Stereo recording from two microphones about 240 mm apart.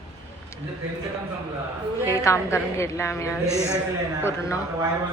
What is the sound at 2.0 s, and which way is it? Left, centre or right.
Speech, centre.